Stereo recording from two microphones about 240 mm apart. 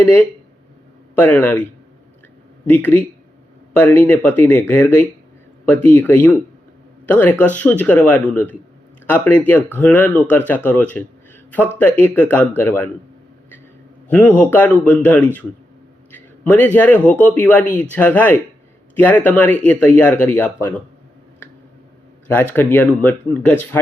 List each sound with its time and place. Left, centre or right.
0.0 s speech: centre
2.6 s speech: centre
14.1 s a man's voice: centre
22.3 s speech: centre